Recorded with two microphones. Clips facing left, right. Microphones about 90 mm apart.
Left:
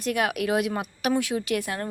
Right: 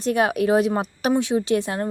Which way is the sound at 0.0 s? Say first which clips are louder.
Right 5 dB; 30° right (ahead or behind).